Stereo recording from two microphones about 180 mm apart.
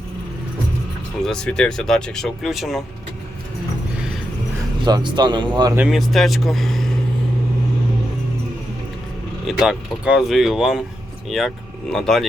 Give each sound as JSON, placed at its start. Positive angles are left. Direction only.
{"t": 1.2, "sound": "speech", "side_deg": 5}
{"t": 4.9, "sound": "speech", "side_deg": -25}
{"t": 5.7, "sound": "speech", "side_deg": -5}
{"t": 9.5, "sound": "speech", "side_deg": -5}